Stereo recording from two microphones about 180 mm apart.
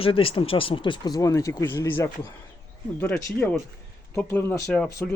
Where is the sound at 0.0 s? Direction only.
30° left (ahead or behind); by 2.0 s 15° left (ahead or behind).